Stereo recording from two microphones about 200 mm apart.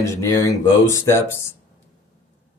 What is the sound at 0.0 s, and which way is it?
Speech, 15° left (ahead or behind).